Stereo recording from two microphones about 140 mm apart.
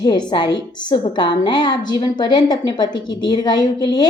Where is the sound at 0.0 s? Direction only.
30° left (ahead or behind).